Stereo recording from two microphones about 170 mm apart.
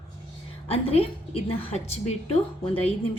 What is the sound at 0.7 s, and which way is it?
A woman's voice, 35° left (ahead or behind).